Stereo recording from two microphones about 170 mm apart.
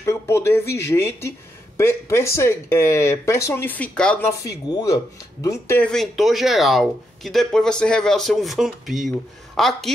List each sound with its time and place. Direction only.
0.0 s speech: 15° left (ahead or behind)
4.3 s speech: 20° left (ahead or behind); by 9.9 s centre (ahead or behind)